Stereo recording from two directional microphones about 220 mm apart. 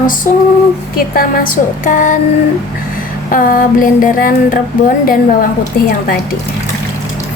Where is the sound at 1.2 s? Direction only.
40° left (ahead or behind).